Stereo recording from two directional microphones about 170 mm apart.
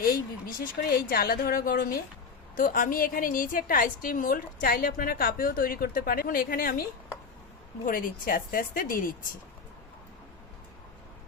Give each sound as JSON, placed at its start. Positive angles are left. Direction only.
{"t": 0.0, "sound": "a woman's voice", "side_deg": 55}
{"t": 7.9, "sound": "a woman's voice", "side_deg": 55}